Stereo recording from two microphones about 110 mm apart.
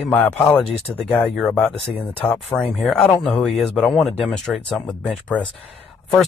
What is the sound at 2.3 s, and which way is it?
Speech, 5° left (ahead or behind).